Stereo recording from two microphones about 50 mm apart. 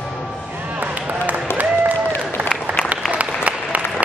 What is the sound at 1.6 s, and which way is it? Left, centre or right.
Applause, right.